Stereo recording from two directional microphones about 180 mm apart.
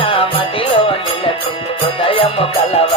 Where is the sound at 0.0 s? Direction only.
30° left (ahead or behind).